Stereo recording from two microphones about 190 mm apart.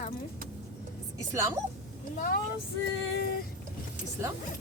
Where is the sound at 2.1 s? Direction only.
50° left (ahead or behind).